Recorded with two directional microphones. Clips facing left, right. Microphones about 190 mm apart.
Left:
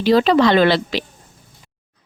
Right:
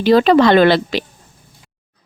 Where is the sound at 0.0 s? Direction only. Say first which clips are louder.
Right 3 dB; 55° right (ahead or behind).